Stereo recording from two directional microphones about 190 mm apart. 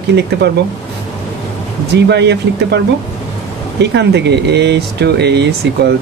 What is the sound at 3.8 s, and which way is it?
Speech, 65° right (ahead or behind).